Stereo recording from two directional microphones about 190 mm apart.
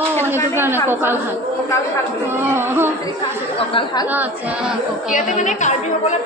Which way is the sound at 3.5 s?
30° left (ahead or behind).